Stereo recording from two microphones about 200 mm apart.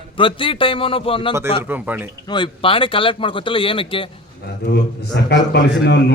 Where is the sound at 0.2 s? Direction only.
25° left (ahead or behind).